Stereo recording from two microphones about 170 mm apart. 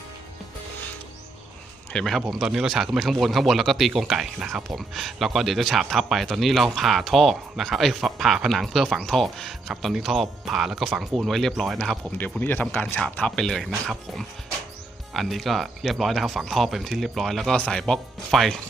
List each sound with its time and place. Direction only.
1.9 s speech: 5° left (ahead or behind)